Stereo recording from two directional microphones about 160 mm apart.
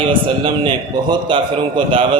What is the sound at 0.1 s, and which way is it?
Speech, 30° right (ahead or behind).